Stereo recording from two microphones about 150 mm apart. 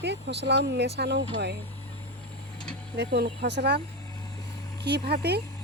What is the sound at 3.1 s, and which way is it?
Speech, 90° right.